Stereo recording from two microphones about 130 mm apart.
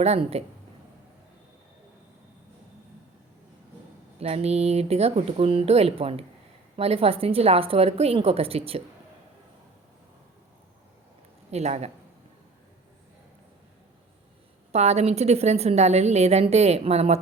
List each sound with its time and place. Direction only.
0.0 s speech: 55° right (ahead or behind)
4.2 s speech: 55° right (ahead or behind)
11.5 s a woman's voice: 55° right (ahead or behind)
14.7 s a woman's voice: 55° right (ahead or behind)